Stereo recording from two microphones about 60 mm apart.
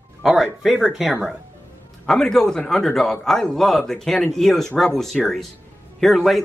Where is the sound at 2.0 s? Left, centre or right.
Centre.